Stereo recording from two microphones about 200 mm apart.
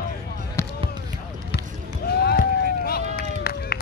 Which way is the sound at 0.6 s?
15° left (ahead or behind).